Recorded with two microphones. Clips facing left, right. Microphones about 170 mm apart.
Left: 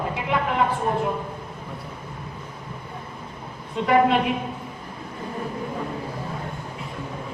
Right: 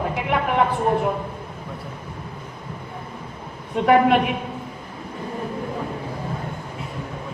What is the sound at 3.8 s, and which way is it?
Speech, 55° right (ahead or behind).